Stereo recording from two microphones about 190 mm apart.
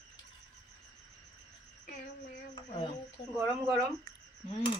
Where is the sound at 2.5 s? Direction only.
25° left (ahead or behind).